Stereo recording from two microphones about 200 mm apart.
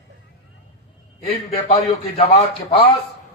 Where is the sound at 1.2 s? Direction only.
30° left (ahead or behind).